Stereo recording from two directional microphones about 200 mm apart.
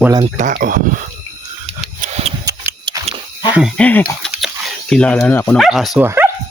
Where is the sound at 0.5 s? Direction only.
45° right (ahead or behind).